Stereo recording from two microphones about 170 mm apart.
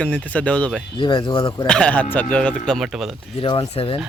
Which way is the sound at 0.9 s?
30° left (ahead or behind).